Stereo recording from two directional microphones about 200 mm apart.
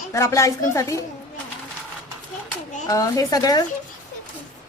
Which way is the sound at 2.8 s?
15° left (ahead or behind).